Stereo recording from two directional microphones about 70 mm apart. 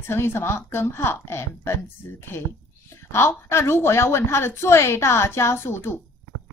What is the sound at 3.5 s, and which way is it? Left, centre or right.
A woman's voice, left.